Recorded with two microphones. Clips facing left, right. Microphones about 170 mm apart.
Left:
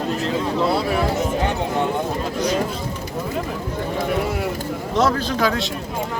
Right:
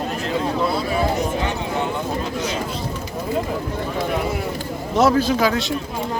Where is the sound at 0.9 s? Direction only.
60° left (ahead or behind).